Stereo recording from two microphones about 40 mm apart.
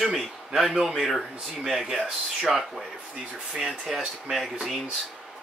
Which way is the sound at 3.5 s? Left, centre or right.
Centre.